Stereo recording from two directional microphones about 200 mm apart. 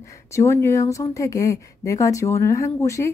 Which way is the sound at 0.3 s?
15° left (ahead or behind).